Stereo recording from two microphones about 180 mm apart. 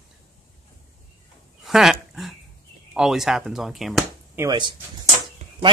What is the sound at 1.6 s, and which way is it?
Dog, centre (ahead or behind).